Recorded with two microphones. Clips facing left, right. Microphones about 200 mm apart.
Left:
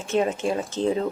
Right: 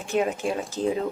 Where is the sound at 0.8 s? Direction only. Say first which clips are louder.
Left 2 dB; 30° left (ahead or behind).